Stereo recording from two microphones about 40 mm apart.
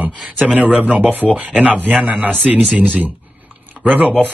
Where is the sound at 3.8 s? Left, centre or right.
Centre.